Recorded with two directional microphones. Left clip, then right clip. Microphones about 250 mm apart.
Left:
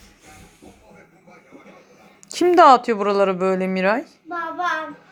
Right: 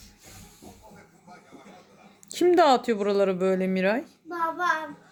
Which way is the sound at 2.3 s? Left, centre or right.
Centre.